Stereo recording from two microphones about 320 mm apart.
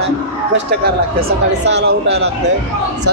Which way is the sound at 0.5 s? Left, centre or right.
Right.